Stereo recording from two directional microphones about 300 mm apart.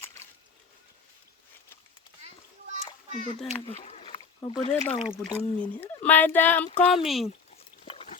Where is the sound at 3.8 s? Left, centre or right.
Centre.